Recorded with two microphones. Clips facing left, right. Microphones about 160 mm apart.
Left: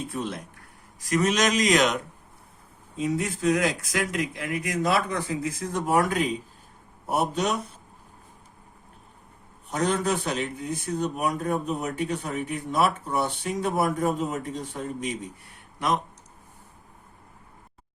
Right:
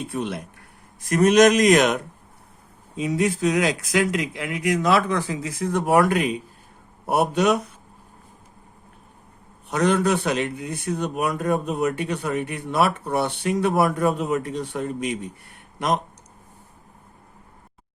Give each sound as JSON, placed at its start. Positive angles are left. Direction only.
{"t": 0.1, "sound": "a man's voice", "side_deg": -65}
{"t": 3.0, "sound": "a man's voice", "side_deg": -85}
{"t": 9.6, "sound": "a man's voice", "side_deg": -70}